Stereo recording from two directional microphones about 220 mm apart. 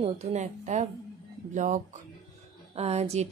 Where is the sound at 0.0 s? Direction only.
30° right (ahead or behind).